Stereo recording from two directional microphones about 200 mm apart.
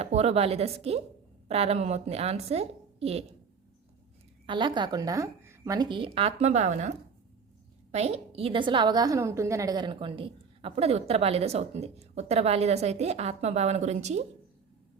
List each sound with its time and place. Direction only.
0.0 s a woman's voice: 30° right (ahead or behind)
4.4 s a woman's voice: 25° right (ahead or behind)